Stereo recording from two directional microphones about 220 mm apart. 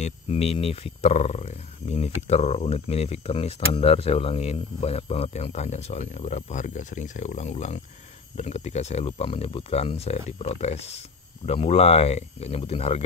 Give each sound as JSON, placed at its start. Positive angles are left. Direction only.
{"t": 0.0, "sound": "speech", "side_deg": 30}